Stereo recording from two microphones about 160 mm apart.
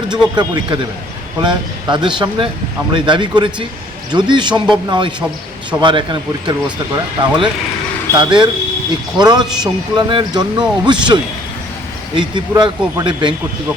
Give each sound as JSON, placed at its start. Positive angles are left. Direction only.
{"t": 0.3, "sound": "speech", "side_deg": -25}